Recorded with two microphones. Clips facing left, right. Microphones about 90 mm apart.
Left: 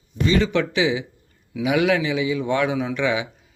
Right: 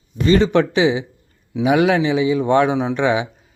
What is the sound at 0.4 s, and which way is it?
A man's voice, 35° right (ahead or behind).